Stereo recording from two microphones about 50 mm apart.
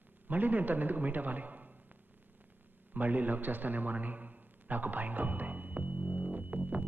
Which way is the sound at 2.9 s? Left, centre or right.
Right.